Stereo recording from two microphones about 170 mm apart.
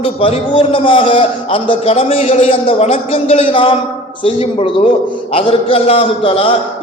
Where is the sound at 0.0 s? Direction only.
30° left (ahead or behind).